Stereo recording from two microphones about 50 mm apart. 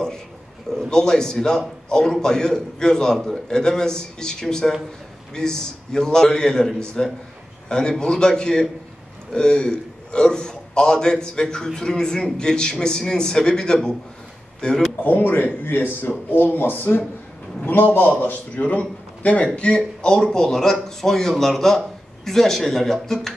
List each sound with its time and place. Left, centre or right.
0.7 s a man's voice: centre
15.0 s a man's voice: left; by 23.3 s centre